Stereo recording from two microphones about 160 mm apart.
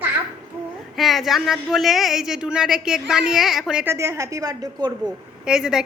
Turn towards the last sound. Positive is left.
turn(degrees=-5)  # may be behind; listen again after turning